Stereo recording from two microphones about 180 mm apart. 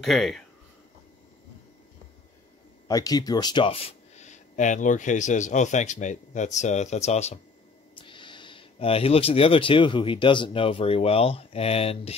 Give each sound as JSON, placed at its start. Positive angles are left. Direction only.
{"t": 0.0, "sound": "speech", "side_deg": 0}
{"t": 2.9, "sound": "speech", "side_deg": 20}